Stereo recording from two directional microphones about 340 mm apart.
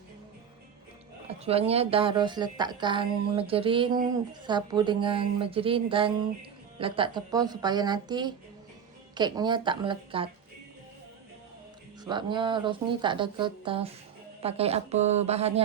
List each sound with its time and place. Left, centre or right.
1.3 s a woman's voice: centre
12.0 s a woman's voice: centre